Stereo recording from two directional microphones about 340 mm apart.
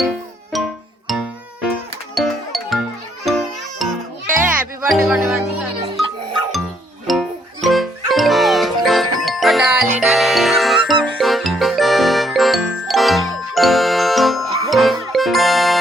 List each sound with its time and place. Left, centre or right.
0.5 s music: centre
2.1 s music: centre
7.1 s music: centre